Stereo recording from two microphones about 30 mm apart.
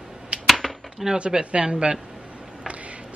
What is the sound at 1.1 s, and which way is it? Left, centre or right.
Speech, right.